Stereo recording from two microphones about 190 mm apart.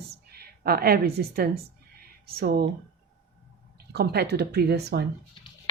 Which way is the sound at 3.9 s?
60° right (ahead or behind).